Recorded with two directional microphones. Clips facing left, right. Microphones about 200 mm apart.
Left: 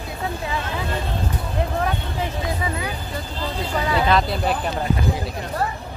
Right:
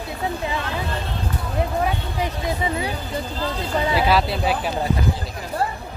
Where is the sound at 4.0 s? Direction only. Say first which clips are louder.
Left 1 dB; 5° right (ahead or behind).